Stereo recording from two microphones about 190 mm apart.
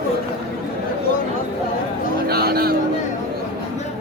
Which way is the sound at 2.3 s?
55° right (ahead or behind).